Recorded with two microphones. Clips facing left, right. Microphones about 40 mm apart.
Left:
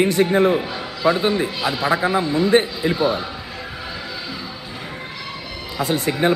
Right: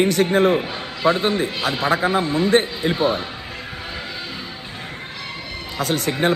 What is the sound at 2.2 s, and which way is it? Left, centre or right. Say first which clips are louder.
Speech: left 1 dB; right.